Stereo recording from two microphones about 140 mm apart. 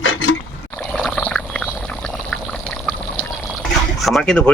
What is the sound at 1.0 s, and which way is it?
Pour, 10° left (ahead or behind).